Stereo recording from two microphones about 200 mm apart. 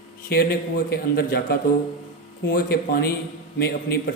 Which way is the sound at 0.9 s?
50° left (ahead or behind).